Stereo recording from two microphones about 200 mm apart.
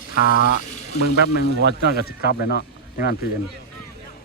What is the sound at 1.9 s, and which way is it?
A man's voice, 50° left (ahead or behind).